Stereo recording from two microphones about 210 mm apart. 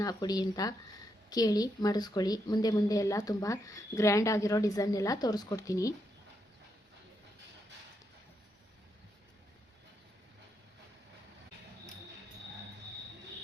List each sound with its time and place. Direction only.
0.0 s a woman's voice: 20° left (ahead or behind)